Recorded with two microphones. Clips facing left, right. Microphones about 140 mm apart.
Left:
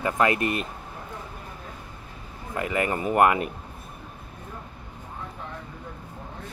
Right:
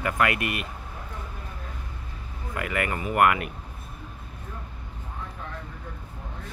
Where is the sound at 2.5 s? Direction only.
25° left (ahead or behind).